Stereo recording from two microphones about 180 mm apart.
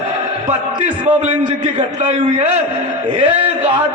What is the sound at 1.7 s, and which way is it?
A man's voice, 40° right (ahead or behind).